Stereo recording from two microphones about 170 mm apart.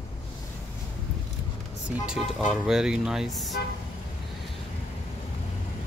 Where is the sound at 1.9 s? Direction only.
5° right (ahead or behind).